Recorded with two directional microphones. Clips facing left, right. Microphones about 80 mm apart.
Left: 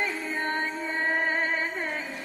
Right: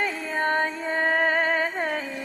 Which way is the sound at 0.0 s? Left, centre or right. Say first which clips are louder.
Right 4 dB; right.